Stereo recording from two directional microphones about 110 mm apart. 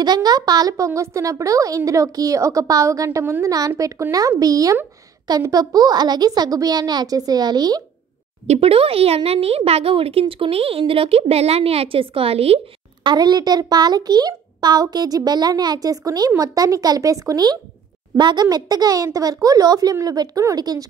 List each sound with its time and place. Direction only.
0.0 s a child's voice: 40° right (ahead or behind)
8.5 s speech: 65° right (ahead or behind)
13.0 s a child's voice: 40° right (ahead or behind)